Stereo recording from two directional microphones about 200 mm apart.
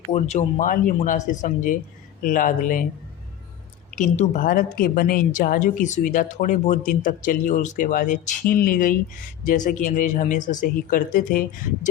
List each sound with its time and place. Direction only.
0.1 s a woman's voice: 35° left (ahead or behind)
3.9 s a woman's voice: 40° left (ahead or behind)